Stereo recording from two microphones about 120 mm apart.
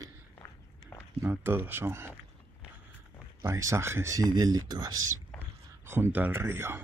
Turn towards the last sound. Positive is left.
turn(degrees=-20)  # may be behind; listen again after turning